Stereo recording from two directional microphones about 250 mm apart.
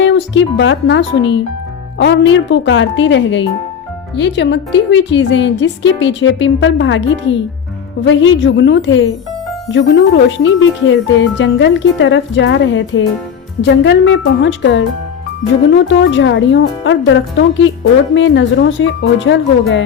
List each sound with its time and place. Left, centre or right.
0.0 s speech: left